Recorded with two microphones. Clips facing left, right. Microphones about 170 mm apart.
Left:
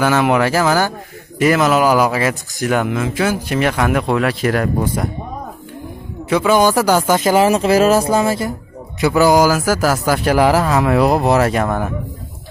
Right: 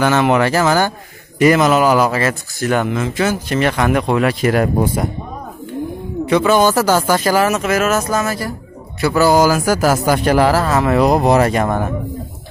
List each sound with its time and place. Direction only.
0.0 s speech: 5° left (ahead or behind)
6.2 s speech: 10° left (ahead or behind); by 8.5 s 25° left (ahead or behind)
9.0 s a man's voice: 15° left (ahead or behind)